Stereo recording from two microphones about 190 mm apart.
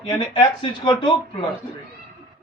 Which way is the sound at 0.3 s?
25° left (ahead or behind).